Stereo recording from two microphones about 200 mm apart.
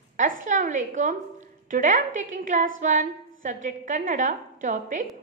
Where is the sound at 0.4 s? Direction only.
40° right (ahead or behind).